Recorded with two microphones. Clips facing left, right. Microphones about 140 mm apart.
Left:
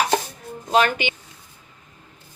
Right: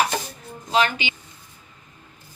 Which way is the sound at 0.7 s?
50° left (ahead or behind).